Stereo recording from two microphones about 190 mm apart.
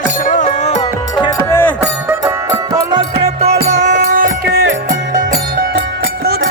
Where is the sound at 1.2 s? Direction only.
20° left (ahead or behind).